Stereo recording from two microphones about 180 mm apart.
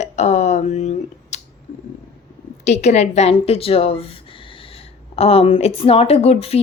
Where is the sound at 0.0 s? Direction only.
40° left (ahead or behind).